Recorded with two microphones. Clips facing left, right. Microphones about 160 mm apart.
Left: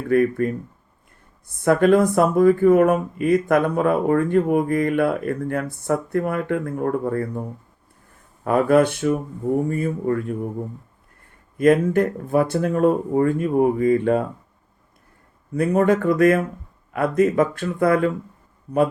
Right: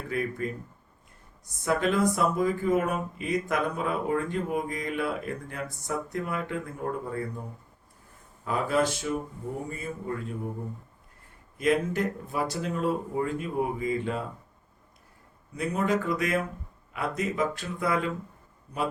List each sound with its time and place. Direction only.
0.1 s speech: 55° left (ahead or behind)
8.4 s speech: 55° left (ahead or behind)
11.5 s speech: 55° left (ahead or behind)
15.5 s speech: 55° left (ahead or behind)